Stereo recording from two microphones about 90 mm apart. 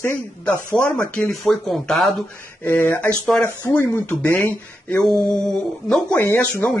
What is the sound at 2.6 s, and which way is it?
Speech, 25° left (ahead or behind).